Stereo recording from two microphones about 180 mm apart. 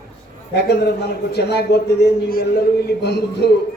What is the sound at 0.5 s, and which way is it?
A man's voice, 65° left (ahead or behind).